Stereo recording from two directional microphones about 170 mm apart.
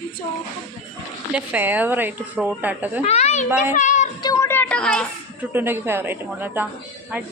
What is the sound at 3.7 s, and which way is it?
Child singing, 45° left (ahead or behind).